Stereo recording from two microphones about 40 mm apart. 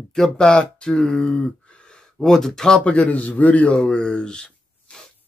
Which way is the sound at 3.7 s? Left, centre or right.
Left.